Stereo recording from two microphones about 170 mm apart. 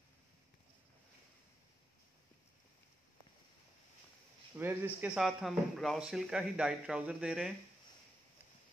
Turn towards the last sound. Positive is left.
turn(degrees=-5)  # may be behind; listen again after turning